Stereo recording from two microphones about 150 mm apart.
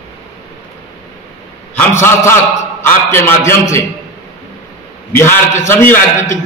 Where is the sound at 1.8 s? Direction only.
15° left (ahead or behind).